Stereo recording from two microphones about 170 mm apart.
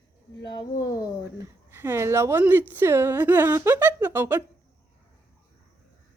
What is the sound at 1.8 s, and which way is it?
Speech, 15° right (ahead or behind).